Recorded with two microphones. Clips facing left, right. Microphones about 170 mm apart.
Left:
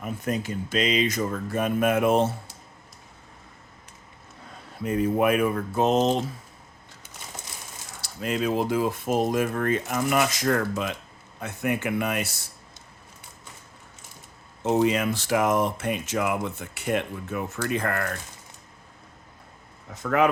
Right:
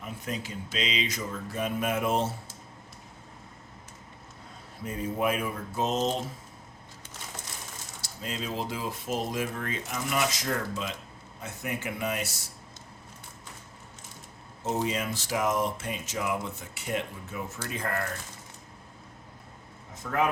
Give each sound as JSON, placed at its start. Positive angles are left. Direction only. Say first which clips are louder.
{"t": 0.0, "sound": "speech", "louder": "left 7 dB", "side_deg": 50}
{"t": 4.8, "sound": "speech", "louder": "left 7 dB", "side_deg": 65}
{"t": 8.0, "sound": "speech", "louder": "left 9 dB", "side_deg": 65}
{"t": 14.6, "sound": "speech", "louder": "left 8 dB", "side_deg": 70}
{"t": 20.0, "sound": "speech", "louder": "left 6 dB", "side_deg": 90}